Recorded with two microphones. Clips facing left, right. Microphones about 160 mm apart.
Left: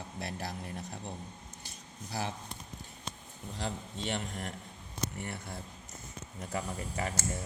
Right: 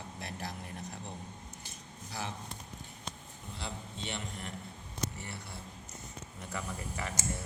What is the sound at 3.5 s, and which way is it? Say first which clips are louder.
Speech: left 5 dB; 45° left (ahead or behind).